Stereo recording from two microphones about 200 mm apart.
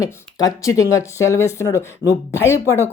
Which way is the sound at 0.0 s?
15° left (ahead or behind).